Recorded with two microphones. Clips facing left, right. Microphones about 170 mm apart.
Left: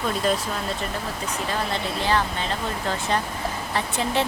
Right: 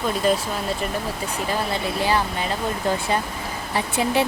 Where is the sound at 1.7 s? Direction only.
10° right (ahead or behind).